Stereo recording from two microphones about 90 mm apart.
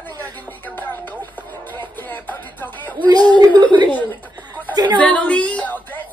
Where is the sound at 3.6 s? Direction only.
60° right (ahead or behind).